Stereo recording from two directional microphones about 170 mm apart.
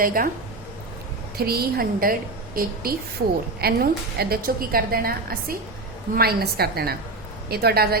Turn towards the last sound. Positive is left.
turn(degrees=-65)  # may be behind; listen again after turning